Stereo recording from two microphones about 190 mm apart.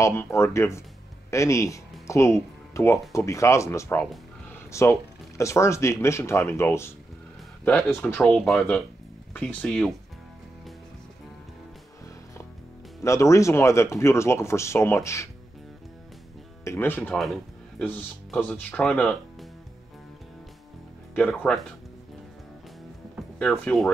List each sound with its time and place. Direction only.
0.0 s speech: 15° left (ahead or behind)
13.0 s speech: 15° left (ahead or behind)
16.6 s speech: 10° left (ahead or behind)
21.1 s speech: 5° left (ahead or behind)
23.6 s speech: 5° left (ahead or behind)